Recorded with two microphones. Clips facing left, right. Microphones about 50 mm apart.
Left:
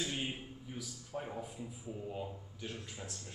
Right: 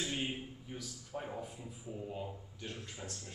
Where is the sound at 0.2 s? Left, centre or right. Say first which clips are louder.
Right 1 dB; centre.